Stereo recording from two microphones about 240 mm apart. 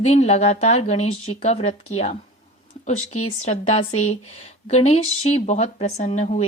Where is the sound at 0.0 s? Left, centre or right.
Left.